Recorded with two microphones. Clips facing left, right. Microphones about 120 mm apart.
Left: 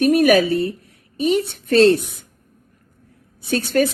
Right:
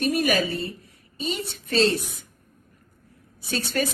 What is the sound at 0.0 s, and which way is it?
Speech, 60° left (ahead or behind).